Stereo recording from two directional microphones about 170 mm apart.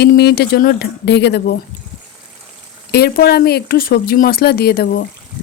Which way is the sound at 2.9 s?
70° left (ahead or behind).